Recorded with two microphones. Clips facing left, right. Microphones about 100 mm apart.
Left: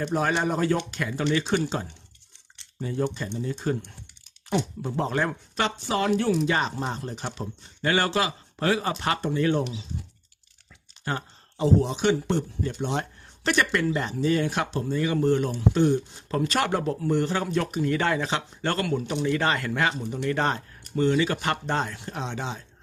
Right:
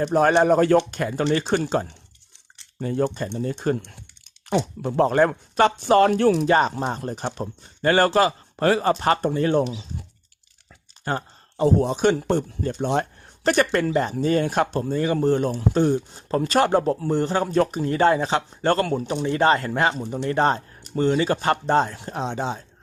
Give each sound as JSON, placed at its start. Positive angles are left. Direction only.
{"t": 0.0, "sound": "speech", "side_deg": -50}
{"t": 0.8, "sound": "speech", "side_deg": -40}
{"t": 3.2, "sound": "speech", "side_deg": -60}
{"t": 11.0, "sound": "speech", "side_deg": -45}